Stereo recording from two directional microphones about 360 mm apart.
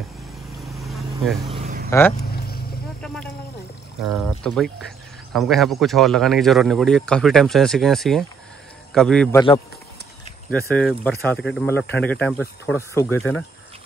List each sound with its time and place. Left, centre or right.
0.7 s vehicle: centre
1.5 s a sound: centre
1.9 s speech: centre
2.3 s boat: left
4.1 s speech: centre
10.7 s speech: centre